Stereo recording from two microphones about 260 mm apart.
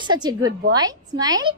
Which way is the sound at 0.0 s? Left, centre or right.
Centre.